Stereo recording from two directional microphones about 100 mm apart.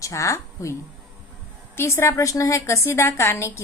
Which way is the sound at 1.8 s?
25° left (ahead or behind).